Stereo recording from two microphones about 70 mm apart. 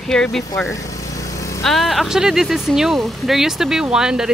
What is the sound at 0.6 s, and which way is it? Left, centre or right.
Vehicle, left.